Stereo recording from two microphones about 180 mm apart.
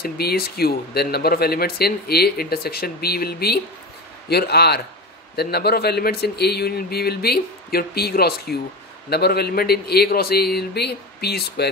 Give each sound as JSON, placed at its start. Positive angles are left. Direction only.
{"t": 0.0, "sound": "speech", "side_deg": 60}